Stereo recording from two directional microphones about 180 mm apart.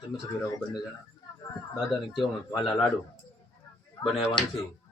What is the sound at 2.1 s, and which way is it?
Speech, centre (ahead or behind).